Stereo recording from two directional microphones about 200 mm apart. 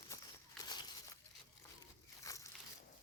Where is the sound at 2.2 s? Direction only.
15° left (ahead or behind).